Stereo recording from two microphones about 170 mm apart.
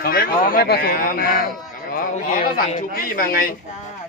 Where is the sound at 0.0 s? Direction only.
60° left (ahead or behind).